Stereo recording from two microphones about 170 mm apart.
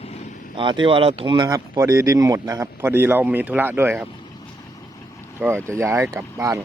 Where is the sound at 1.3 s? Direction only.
25° right (ahead or behind).